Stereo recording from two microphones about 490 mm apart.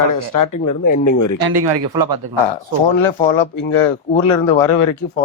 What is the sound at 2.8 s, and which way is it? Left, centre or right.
Speech, left.